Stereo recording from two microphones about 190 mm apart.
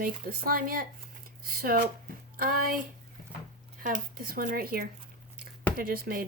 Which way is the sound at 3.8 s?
45° right (ahead or behind).